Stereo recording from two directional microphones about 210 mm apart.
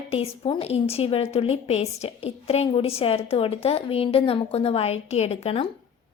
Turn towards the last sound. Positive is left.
turn(degrees=30)  # may be behind; listen again after turning